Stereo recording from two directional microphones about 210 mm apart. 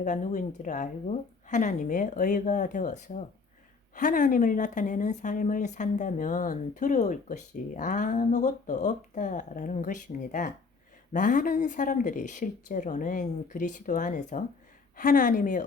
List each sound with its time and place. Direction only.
0.0 s speech: 35° left (ahead or behind)